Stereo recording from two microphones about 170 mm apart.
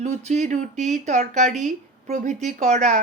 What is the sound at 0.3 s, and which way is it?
Speech, 45° right (ahead or behind).